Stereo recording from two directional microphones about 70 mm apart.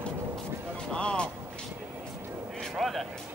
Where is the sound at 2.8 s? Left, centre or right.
Centre.